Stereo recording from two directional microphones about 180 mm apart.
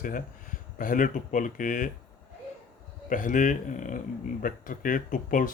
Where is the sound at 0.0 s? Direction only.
50° left (ahead or behind).